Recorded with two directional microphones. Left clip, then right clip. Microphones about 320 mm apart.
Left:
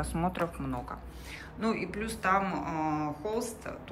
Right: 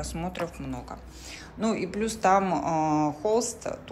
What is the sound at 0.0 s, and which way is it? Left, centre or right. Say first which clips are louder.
A woman's voice: left 1 dB; centre.